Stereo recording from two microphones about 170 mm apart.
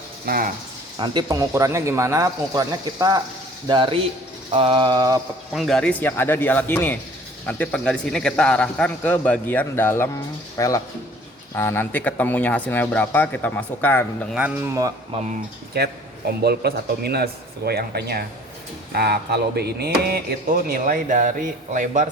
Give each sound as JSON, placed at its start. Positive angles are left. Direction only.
{"t": 0.3, "sound": "speech", "side_deg": -60}
{"t": 0.9, "sound": "a man's voice", "side_deg": -25}
{"t": 4.5, "sound": "a sound", "side_deg": -30}
{"t": 5.5, "sound": "speech", "side_deg": 0}
{"t": 14.3, "sound": "speech", "side_deg": -10}
{"t": 15.8, "sound": "speech", "side_deg": -70}